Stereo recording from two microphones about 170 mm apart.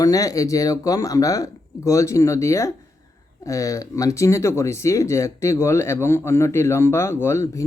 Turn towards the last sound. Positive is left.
turn(degrees=20)  # may be behind; listen again after turning